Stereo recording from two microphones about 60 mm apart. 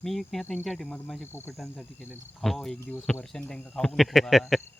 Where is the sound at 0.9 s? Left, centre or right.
Centre.